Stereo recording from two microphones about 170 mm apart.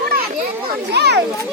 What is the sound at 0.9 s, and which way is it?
Speech, 80° right.